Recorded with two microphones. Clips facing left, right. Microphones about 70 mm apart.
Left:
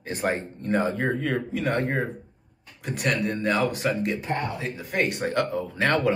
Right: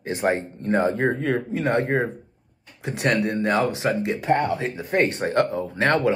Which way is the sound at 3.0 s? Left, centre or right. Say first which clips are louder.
Right 4 dB; right.